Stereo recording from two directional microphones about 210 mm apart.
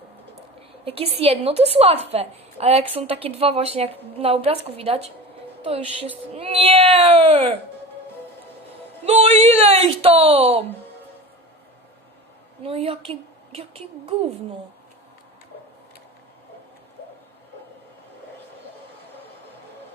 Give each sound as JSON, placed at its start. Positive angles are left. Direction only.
{"t": 0.9, "sound": "speech", "side_deg": -25}
{"t": 9.0, "sound": "speech", "side_deg": -30}
{"t": 12.6, "sound": "speech", "side_deg": -25}